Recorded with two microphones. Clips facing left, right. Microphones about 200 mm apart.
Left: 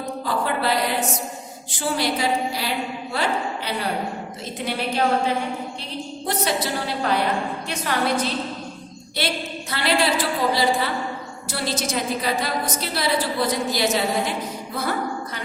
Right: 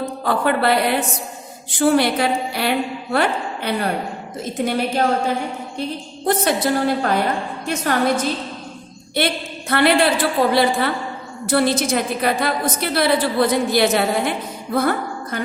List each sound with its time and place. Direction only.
0.3 s a woman's voice: 60° right (ahead or behind)
6.2 s a woman's voice: 50° right (ahead or behind)